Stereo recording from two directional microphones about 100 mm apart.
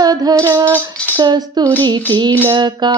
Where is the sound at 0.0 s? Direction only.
40° right (ahead or behind).